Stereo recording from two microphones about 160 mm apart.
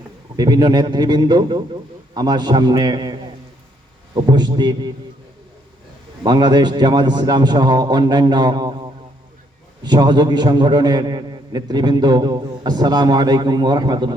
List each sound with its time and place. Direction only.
0.3 s a man's voice: 25° right (ahead or behind)
6.2 s a man's voice: 25° right (ahead or behind)